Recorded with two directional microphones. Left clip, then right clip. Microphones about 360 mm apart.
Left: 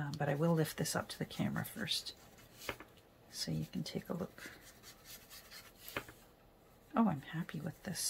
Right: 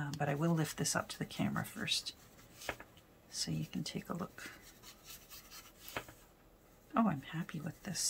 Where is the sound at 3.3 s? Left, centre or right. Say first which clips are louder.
Right 1 dB; centre.